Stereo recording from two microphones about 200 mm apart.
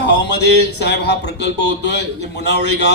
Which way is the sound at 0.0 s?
55° left (ahead or behind).